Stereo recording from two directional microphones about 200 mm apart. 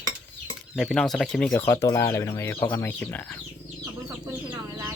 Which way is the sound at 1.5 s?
15° left (ahead or behind).